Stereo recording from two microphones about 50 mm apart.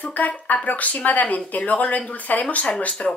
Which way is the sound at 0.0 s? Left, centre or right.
Left.